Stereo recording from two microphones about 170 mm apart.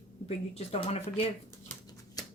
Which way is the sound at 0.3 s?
35° left (ahead or behind).